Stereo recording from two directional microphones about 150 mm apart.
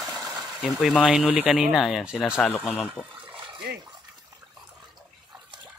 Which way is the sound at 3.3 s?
30° right (ahead or behind).